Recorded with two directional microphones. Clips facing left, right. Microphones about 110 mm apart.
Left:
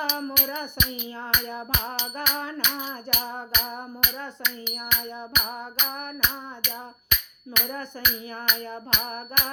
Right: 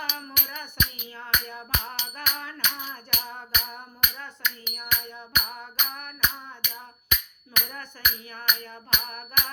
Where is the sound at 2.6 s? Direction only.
5° left (ahead or behind).